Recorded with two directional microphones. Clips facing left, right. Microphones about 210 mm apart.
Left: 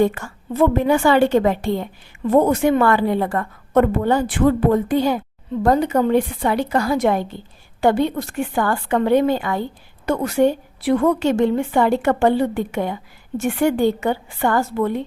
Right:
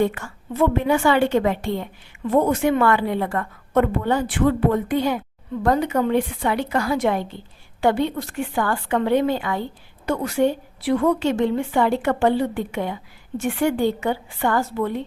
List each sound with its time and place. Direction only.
0.0 s a woman's voice: 40° left (ahead or behind)
10.8 s a woman's voice: 45° left (ahead or behind)